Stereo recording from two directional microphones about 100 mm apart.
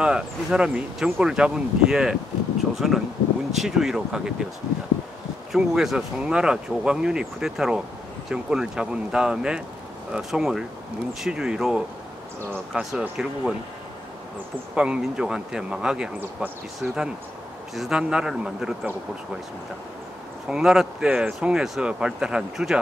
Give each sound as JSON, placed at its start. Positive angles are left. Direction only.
{"t": 0.0, "sound": "speech", "side_deg": -10}
{"t": 5.5, "sound": "speech", "side_deg": -5}
{"t": 14.8, "sound": "speech", "side_deg": -10}
{"t": 20.4, "sound": "speech", "side_deg": -5}